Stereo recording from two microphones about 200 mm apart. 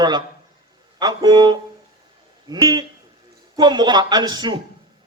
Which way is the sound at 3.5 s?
20° right (ahead or behind).